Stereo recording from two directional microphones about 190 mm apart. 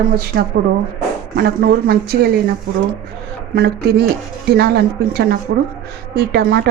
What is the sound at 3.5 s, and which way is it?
A woman's voice, 55° right (ahead or behind).